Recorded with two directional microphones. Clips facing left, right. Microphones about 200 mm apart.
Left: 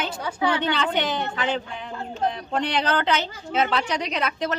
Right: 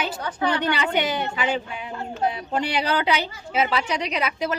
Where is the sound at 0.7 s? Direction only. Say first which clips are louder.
Right 1 dB; 10° right (ahead or behind).